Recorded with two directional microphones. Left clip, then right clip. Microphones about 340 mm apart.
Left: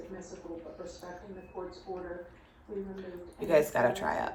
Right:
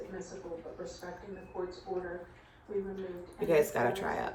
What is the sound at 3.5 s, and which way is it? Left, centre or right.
Speech, centre.